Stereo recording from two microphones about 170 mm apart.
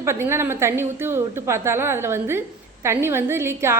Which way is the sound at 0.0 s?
15° right (ahead or behind).